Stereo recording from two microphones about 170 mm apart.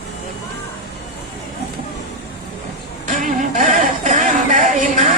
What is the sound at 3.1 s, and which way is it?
Music, 50° right (ahead or behind).